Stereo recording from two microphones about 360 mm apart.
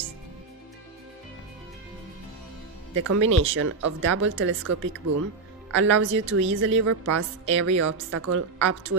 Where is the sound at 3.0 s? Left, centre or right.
Right.